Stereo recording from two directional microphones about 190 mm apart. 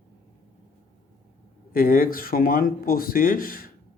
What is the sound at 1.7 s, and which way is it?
Speech, 50° left (ahead or behind).